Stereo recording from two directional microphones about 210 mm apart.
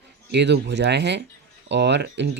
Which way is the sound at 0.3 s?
55° right (ahead or behind).